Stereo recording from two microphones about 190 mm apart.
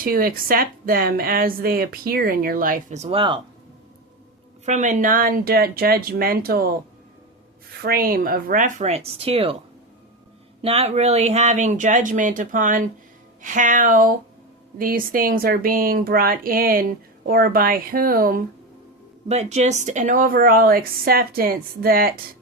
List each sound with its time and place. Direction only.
0.0 s speech: 50° right (ahead or behind); by 3.4 s 25° right (ahead or behind)
4.6 s speech: 40° right (ahead or behind)
7.8 s speech: 50° right (ahead or behind); by 9.6 s 30° right (ahead or behind)
10.6 s speech: 30° right (ahead or behind); by 18.4 s 50° right (ahead or behind)
19.3 s speech: 35° right (ahead or behind)